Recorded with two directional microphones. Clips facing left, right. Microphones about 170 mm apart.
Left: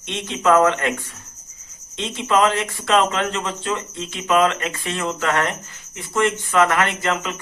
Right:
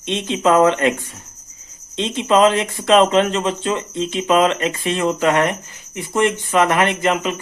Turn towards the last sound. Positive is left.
turn(degrees=-20)  # may be behind; listen again after turning